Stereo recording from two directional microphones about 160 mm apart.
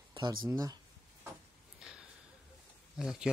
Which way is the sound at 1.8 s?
5° right (ahead or behind).